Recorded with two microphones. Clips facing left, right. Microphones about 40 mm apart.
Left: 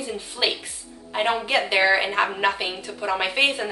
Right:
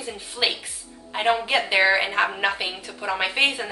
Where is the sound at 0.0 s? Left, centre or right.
Centre.